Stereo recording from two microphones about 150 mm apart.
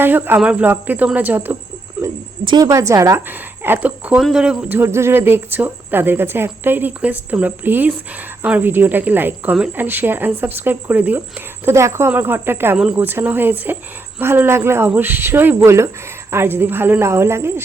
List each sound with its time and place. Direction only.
0.0 s a woman's voice: 15° right (ahead or behind)
2.4 s a woman's voice: 35° right (ahead or behind)
2.6 s a woman's voice: 20° right (ahead or behind)